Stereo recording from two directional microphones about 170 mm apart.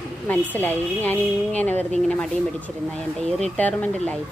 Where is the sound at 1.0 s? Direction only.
10° left (ahead or behind).